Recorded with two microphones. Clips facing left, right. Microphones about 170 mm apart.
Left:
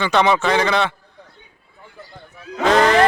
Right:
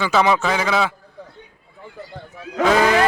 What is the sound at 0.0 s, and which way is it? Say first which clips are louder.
Speech: left 1 dB; 5° right (ahead or behind).